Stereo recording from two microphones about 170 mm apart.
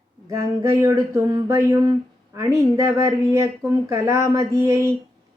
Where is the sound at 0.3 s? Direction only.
20° right (ahead or behind).